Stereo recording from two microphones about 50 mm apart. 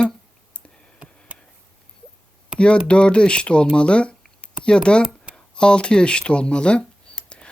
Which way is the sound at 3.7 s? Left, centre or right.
Left.